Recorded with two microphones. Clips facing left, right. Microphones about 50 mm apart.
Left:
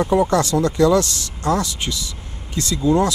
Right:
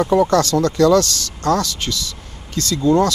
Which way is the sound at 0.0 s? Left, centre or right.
Left.